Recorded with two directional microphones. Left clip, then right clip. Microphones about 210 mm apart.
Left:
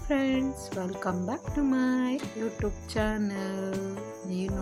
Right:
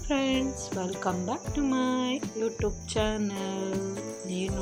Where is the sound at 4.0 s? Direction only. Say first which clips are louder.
Right 2 dB; 30° left (ahead or behind).